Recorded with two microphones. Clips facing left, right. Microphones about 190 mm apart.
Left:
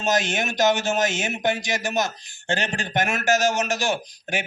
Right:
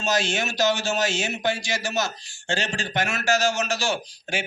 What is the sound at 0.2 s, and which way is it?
Speech, 20° left (ahead or behind).